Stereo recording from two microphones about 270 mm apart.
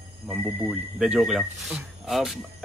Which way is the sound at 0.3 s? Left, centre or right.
Centre.